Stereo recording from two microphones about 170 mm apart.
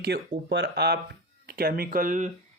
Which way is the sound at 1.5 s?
60° right (ahead or behind).